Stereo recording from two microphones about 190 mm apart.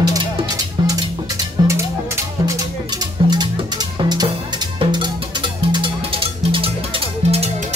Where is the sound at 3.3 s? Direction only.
20° right (ahead or behind).